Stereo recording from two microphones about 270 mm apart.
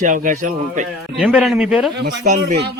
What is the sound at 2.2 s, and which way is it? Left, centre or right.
Speech, right.